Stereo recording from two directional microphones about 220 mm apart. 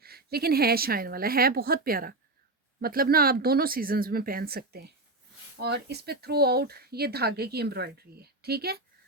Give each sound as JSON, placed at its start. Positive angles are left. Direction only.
{"t": 0.0, "sound": "speech", "side_deg": -45}